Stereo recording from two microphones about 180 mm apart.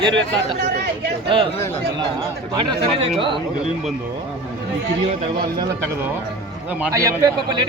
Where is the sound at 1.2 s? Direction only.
30° right (ahead or behind).